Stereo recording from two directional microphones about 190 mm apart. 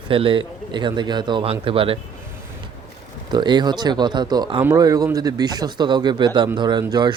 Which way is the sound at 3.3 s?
25° right (ahead or behind).